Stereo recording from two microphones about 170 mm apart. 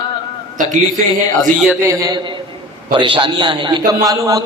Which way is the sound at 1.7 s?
15° right (ahead or behind).